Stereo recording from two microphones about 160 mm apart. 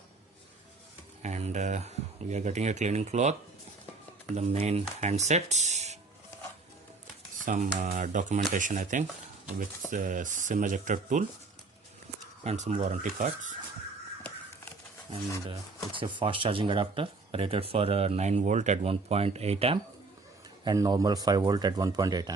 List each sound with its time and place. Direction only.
1.2 s speech: 45° right (ahead or behind)
4.4 s speech: 45° right (ahead or behind)
7.4 s speech: 50° right (ahead or behind)
12.4 s speech: 45° right (ahead or behind)
15.4 s speech: 30° right (ahead or behind)
20.7 s a man's voice: 25° right (ahead or behind)